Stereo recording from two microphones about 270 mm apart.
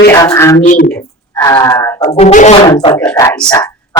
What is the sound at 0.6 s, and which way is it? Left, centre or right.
Speech, left.